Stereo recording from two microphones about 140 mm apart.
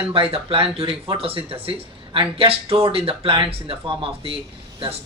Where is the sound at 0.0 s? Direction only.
40° right (ahead or behind).